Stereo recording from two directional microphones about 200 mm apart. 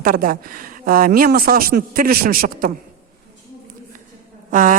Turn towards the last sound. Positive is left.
turn(degrees=-40)  # may be behind; listen again after turning